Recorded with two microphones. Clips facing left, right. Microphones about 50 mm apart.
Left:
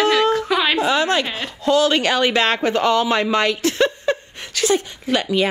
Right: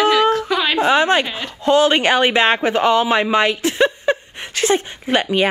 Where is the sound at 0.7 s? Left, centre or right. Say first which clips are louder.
Right 3 dB; right.